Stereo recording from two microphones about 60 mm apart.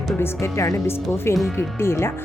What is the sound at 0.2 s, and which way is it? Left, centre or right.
Speech, left.